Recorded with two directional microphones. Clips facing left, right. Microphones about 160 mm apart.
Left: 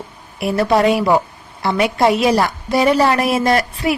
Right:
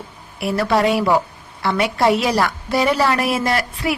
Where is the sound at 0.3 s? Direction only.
20° left (ahead or behind).